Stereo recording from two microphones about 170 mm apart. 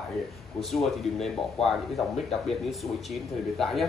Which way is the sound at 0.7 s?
Centre (ahead or behind).